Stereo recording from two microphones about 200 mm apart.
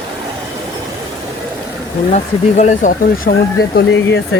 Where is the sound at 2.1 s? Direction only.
35° left (ahead or behind).